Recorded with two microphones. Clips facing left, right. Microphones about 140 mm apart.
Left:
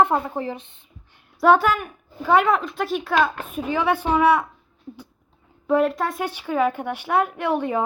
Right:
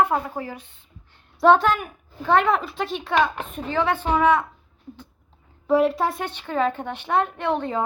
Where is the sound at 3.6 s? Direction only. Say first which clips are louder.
Left 1 dB; 10° left (ahead or behind).